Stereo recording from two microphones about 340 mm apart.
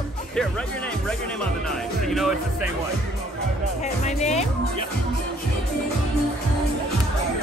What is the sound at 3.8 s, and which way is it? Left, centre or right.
Speech, centre.